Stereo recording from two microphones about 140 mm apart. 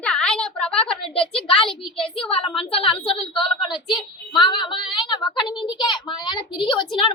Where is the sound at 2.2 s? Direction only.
40° left (ahead or behind).